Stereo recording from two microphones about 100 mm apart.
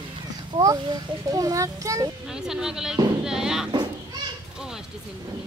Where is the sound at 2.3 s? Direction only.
5° right (ahead or behind).